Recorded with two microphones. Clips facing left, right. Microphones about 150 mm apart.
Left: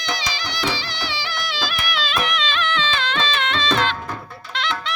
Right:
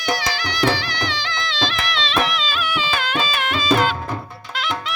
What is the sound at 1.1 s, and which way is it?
Music, 10° left (ahead or behind).